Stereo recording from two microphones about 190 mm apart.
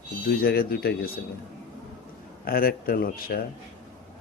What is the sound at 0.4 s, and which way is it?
Speech, 55° left (ahead or behind).